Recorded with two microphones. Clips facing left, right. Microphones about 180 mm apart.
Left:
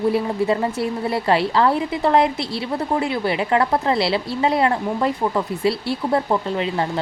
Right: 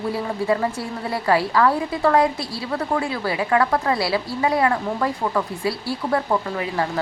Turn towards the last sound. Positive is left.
turn(degrees=25)  # may be behind; listen again after turning